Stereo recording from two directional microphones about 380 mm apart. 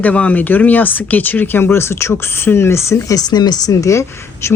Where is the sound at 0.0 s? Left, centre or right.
Centre.